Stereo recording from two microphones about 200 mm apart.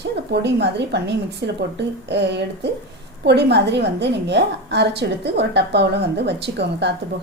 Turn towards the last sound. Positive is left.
turn(degrees=-60)  # may be behind; listen again after turning